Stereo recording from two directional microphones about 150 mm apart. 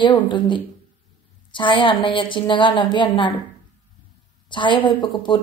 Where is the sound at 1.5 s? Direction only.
35° left (ahead or behind).